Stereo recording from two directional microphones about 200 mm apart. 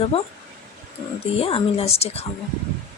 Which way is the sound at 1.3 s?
30° left (ahead or behind).